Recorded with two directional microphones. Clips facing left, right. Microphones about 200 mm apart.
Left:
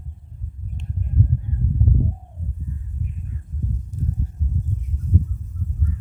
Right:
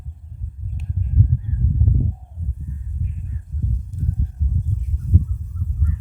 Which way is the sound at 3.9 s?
60° right (ahead or behind).